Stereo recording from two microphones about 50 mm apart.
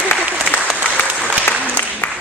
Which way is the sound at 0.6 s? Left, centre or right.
Right.